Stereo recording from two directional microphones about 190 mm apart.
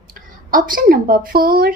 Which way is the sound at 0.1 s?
45° right (ahead or behind).